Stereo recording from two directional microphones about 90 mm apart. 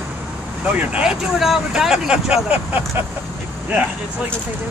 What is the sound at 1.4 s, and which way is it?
Speech, centre (ahead or behind).